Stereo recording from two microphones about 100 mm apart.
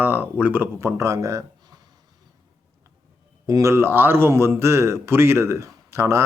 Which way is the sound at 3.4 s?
30° right (ahead or behind).